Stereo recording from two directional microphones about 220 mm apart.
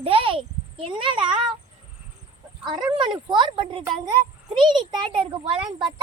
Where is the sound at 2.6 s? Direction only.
20° right (ahead or behind).